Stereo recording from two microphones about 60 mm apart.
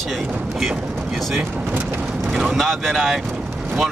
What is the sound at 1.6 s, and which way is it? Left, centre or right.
Speech, right.